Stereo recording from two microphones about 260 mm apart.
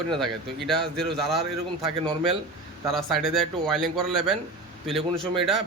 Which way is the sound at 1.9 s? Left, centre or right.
Centre.